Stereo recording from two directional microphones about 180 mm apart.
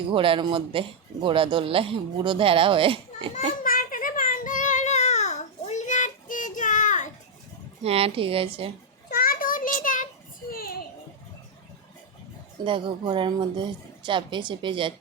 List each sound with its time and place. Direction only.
0.1 s a man's voice: 30° right (ahead or behind)
3.6 s child singing: 50° left (ahead or behind)
7.9 s a woman's voice: 30° right (ahead or behind)
9.0 s a sound: 55° left (ahead or behind)
10.5 s children playing: 55° left (ahead or behind)
12.6 s a man's voice: 25° right (ahead or behind)